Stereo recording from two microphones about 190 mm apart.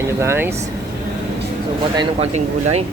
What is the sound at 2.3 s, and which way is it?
Speech, 35° right (ahead or behind).